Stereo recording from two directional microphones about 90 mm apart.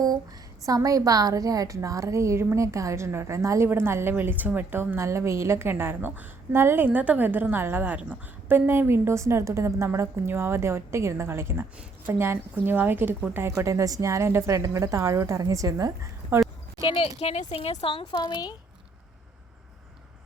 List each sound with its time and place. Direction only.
0.6 s a woman's voice: 40° right (ahead or behind); by 13.5 s 25° right (ahead or behind)
13.5 s a woman's voice: 35° right (ahead or behind)
17.5 s speech: 90° left
18.0 s a woman's voice: 45° left (ahead or behind)